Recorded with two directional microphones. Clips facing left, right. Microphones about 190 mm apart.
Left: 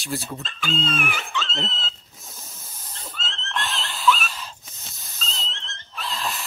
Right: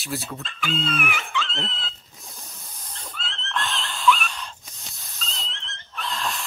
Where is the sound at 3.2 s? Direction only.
40° left (ahead or behind).